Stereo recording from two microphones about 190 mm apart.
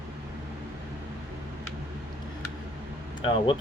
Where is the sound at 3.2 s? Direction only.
25° left (ahead or behind).